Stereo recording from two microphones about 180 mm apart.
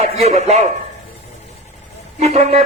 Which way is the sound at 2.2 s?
35° right (ahead or behind).